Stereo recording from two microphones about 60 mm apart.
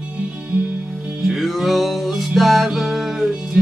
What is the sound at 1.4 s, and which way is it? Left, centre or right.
Music, centre.